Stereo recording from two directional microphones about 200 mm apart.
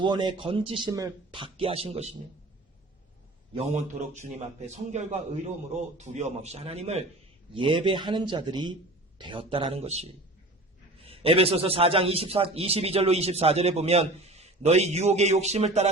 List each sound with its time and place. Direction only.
0.0 s a man's voice: 20° right (ahead or behind)
3.5 s a man's voice: 35° right (ahead or behind)